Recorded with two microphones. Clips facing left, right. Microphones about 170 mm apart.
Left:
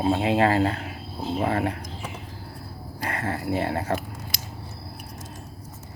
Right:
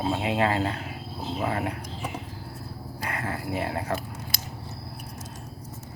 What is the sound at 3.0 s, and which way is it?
Speech, 30° left (ahead or behind).